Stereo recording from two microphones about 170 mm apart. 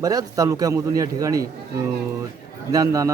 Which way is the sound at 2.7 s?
20° right (ahead or behind).